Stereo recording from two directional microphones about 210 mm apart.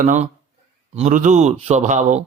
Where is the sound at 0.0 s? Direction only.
35° right (ahead or behind).